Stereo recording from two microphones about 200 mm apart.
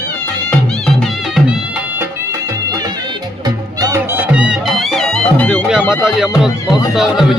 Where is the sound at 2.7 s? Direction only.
20° right (ahead or behind).